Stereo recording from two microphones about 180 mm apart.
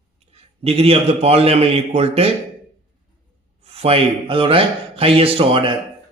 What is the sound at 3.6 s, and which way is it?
A man's voice, 35° right (ahead or behind).